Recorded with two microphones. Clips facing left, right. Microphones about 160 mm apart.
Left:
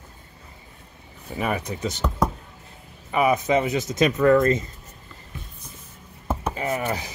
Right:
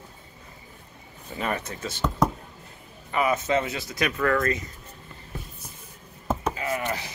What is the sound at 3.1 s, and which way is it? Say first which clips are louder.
Speech: left 4 dB; 10° left (ahead or behind).